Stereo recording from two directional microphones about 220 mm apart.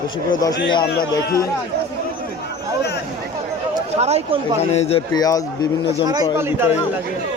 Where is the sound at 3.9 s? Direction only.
30° right (ahead or behind).